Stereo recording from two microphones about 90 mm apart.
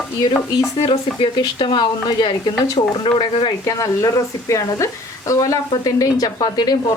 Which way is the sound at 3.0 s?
70° left (ahead or behind).